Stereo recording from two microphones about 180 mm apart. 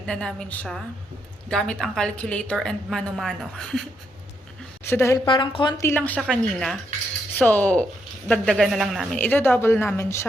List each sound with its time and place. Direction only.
0.0 s a woman's voice: 5° left (ahead or behind)
4.9 s speech: 15° left (ahead or behind)
5.2 s a woman's voice: 25° left (ahead or behind)
5.8 s a woman's voice: 10° left (ahead or behind)